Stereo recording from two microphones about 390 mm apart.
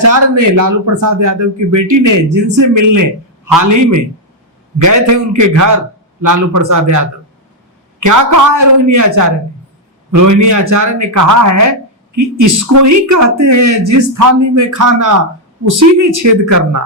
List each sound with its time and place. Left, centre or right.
0.0 s speech: right
8.0 s speech: right